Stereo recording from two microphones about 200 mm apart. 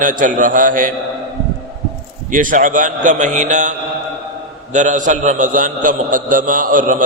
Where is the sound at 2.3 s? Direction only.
40° right (ahead or behind).